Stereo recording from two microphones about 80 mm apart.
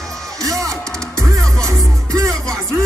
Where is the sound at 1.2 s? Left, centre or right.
Right.